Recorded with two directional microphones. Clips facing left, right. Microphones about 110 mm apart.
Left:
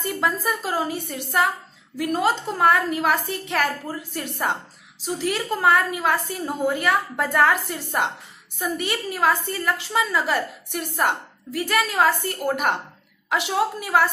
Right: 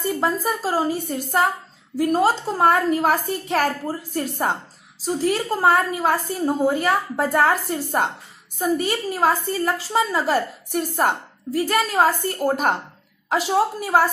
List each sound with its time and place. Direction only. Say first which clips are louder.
0.0 s a woman's voice: right 2 dB; 35° right (ahead or behind)